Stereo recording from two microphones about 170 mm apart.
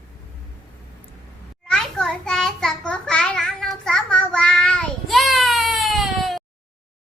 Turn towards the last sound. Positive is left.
turn(degrees=0)  # may be behind; listen again after turning